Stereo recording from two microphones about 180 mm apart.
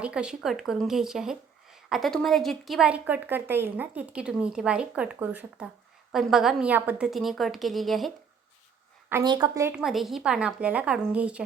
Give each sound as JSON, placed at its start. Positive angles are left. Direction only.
{"t": 0.0, "sound": "speech", "side_deg": -5}
{"t": 9.2, "sound": "a woman's voice", "side_deg": -25}
{"t": 9.7, "sound": "speech", "side_deg": 0}